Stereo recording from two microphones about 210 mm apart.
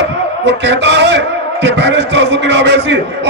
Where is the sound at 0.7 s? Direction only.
55° right (ahead or behind).